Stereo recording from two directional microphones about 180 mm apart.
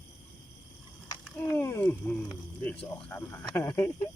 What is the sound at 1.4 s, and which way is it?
Cricket, 10° left (ahead or behind).